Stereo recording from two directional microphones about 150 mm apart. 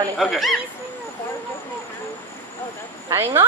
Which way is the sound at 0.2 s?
Centre (ahead or behind).